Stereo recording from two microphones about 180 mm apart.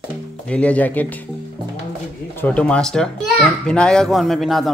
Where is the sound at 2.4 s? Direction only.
5° left (ahead or behind).